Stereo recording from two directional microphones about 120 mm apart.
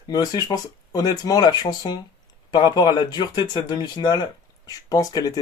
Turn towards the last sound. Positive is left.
turn(degrees=30)  # may be behind; listen again after turning